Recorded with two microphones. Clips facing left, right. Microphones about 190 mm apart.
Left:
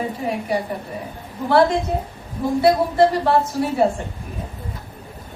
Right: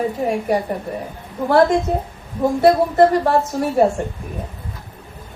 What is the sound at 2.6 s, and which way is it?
Speech, 45° right (ahead or behind).